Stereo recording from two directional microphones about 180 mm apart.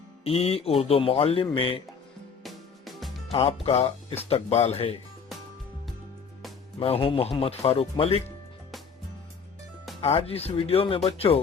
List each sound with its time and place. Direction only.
0.3 s speech: 35° left (ahead or behind)
2.4 s music: centre (ahead or behind)
3.3 s speech: 35° left (ahead or behind)
6.7 s speech: 30° left (ahead or behind)
10.0 s speech: 30° left (ahead or behind)